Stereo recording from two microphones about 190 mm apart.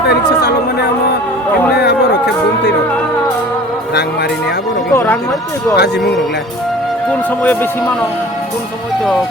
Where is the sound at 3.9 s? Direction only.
60° left (ahead or behind).